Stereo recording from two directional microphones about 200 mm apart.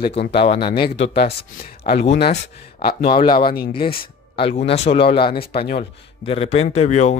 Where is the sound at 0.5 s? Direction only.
25° left (ahead or behind).